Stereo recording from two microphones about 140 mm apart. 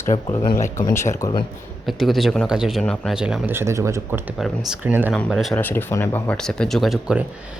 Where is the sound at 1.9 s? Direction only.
Centre (ahead or behind).